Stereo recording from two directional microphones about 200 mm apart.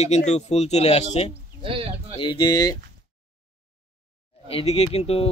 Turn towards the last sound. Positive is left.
turn(degrees=30)  # may be behind; listen again after turning